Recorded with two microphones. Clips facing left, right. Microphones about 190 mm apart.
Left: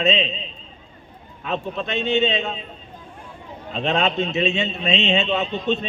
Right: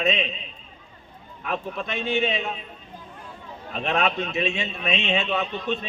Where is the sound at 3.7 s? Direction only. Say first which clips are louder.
Left 3 dB; 25° left (ahead or behind).